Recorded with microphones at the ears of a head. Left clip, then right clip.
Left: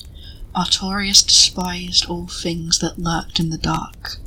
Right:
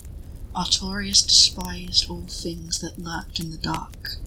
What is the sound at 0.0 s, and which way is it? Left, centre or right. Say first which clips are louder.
Speech: left 9 dB; left.